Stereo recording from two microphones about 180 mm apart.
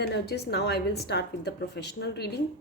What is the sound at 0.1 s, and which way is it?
A woman's voice, 65° left (ahead or behind).